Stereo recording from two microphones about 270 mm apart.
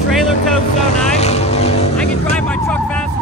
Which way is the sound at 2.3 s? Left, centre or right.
Centre.